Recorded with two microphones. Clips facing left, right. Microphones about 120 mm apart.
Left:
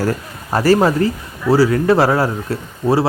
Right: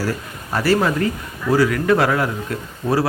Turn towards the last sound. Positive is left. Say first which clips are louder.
# left 4 dB
turn(degrees=30)  # may be behind; listen again after turning